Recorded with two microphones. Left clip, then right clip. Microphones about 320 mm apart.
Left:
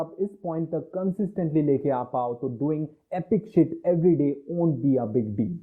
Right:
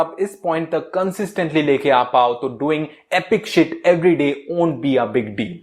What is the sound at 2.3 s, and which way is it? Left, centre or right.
Speech, centre.